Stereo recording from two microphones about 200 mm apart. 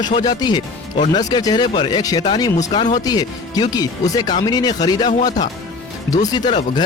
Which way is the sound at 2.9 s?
20° left (ahead or behind).